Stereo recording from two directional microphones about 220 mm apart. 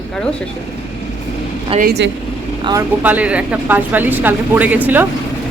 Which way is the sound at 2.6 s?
20° right (ahead or behind).